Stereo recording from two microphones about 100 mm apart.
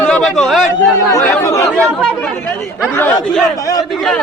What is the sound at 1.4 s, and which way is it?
Speech, 30° left (ahead or behind).